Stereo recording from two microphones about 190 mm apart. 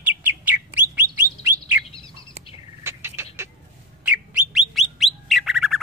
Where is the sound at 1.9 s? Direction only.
25° left (ahead or behind).